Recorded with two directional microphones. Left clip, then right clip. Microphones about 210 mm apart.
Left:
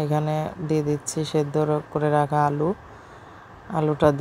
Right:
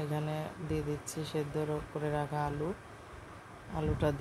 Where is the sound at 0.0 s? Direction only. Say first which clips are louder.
Left 13 dB; 30° left (ahead or behind).